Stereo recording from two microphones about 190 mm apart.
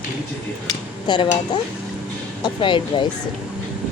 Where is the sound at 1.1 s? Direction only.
25° left (ahead or behind).